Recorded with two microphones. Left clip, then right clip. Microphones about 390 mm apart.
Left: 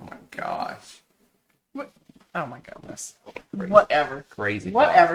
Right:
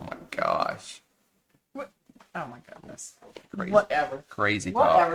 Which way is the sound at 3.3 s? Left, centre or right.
Left.